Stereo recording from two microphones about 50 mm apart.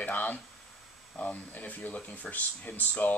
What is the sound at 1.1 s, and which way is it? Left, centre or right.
Speech, left.